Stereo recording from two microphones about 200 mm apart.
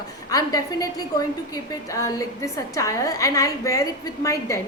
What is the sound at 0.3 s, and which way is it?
A woman's voice, 20° left (ahead or behind).